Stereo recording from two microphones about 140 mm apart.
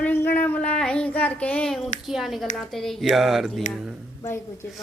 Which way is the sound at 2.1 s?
Centre (ahead or behind).